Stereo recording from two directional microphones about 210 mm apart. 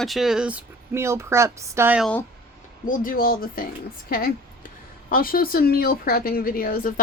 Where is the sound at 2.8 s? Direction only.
40° left (ahead or behind).